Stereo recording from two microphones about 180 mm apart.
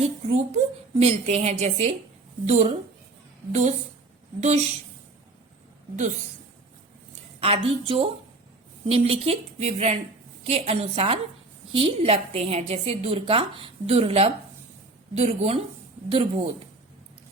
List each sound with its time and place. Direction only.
0.0 s a woman's voice: 40° right (ahead or behind)
7.3 s a woman's voice: 30° right (ahead or behind)